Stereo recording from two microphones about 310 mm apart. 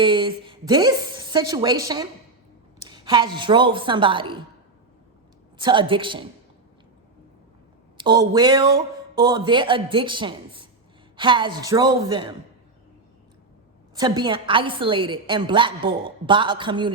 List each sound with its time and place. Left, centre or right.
0.0 s a woman's voice: centre
5.5 s a woman's voice: centre
7.9 s a woman's voice: centre
13.9 s a woman's voice: centre